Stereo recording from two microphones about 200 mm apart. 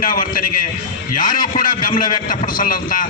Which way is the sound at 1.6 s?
45° left (ahead or behind).